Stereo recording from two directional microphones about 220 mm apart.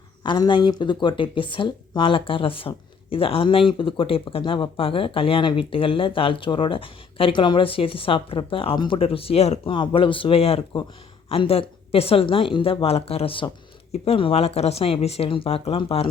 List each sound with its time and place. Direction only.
0.2 s speech: 20° left (ahead or behind)